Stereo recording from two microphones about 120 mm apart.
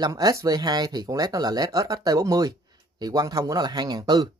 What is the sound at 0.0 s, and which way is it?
Speech, 30° right (ahead or behind).